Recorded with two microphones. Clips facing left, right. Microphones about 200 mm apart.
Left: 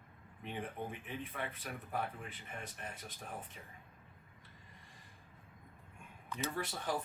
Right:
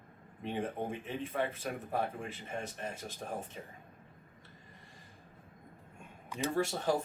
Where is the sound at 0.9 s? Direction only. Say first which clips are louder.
Right 6 dB; 25° right (ahead or behind); by 2.2 s 40° right (ahead or behind).